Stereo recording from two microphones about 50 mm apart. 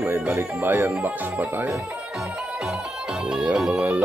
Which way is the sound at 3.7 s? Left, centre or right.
Right.